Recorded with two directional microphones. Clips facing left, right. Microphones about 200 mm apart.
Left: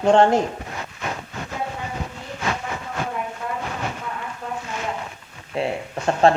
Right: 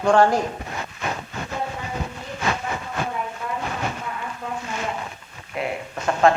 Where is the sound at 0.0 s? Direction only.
25° left (ahead or behind).